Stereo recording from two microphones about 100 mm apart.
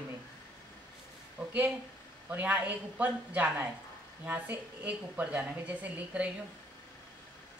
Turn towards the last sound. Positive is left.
turn(degrees=-15)  # may be behind; listen again after turning